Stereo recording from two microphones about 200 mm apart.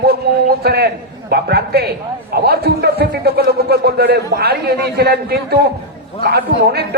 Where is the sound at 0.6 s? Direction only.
50° right (ahead or behind).